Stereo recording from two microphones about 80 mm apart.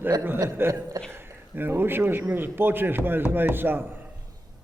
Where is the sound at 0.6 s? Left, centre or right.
Right.